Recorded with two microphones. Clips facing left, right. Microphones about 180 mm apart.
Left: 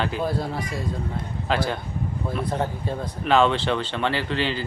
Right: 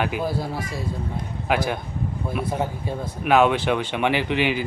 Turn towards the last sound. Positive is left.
turn(degrees=-15)  # may be behind; listen again after turning